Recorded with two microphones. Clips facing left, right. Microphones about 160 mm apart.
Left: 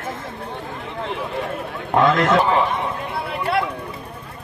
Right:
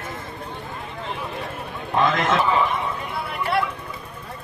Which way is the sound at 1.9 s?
75° left (ahead or behind).